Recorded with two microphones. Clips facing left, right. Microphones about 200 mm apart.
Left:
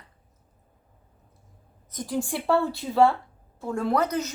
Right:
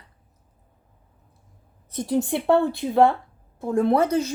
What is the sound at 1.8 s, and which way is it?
A woman's voice, 30° right (ahead or behind).